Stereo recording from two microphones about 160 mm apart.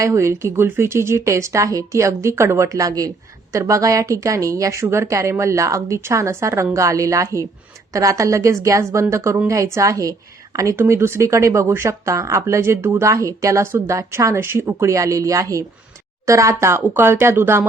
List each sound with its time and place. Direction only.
0.0 s a woman's voice: 20° right (ahead or behind)